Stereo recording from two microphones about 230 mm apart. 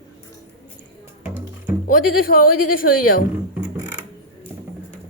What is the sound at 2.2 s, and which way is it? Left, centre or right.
A woman's voice, left.